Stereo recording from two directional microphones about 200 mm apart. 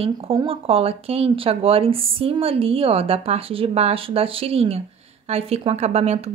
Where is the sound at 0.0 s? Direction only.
30° right (ahead or behind).